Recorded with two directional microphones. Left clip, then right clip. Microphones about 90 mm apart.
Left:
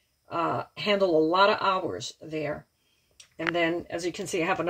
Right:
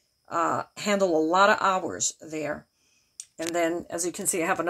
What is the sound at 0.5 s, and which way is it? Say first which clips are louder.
Speech: even; 20° right (ahead or behind).